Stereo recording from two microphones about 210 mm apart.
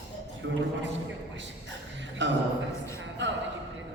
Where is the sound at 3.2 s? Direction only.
60° right (ahead or behind).